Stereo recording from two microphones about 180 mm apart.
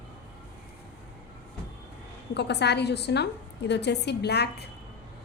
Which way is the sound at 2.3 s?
70° left (ahead or behind).